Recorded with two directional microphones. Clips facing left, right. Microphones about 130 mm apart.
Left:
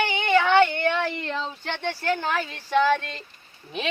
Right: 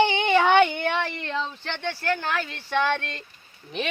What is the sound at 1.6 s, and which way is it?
Speech, 15° left (ahead or behind).